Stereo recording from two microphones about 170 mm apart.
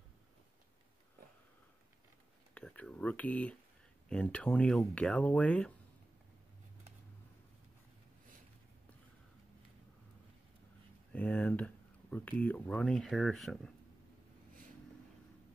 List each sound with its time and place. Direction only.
2.5 s speech: 10° left (ahead or behind)
11.1 s speech: 10° left (ahead or behind)